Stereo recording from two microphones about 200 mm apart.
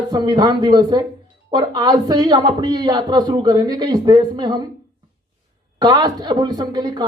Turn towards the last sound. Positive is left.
turn(degrees=-20)  # may be behind; listen again after turning